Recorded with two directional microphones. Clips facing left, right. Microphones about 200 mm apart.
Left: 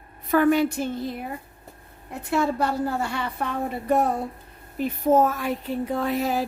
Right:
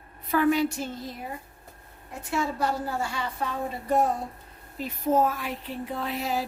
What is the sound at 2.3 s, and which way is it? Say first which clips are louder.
A woman's voice: left 4 dB; 60° left (ahead or behind).